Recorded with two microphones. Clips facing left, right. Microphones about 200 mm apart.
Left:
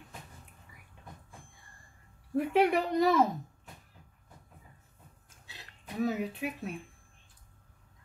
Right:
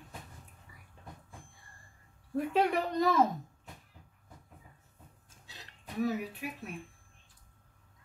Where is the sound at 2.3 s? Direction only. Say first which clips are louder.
Left 3 dB; 15° left (ahead or behind).